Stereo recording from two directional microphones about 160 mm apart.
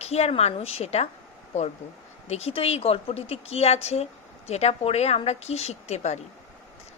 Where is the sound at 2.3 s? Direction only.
40° left (ahead or behind).